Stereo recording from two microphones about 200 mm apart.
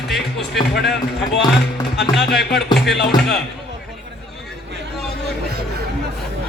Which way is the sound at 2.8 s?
55° left (ahead or behind).